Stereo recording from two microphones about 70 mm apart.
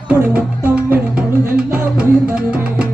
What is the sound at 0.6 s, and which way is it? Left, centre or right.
Music, right.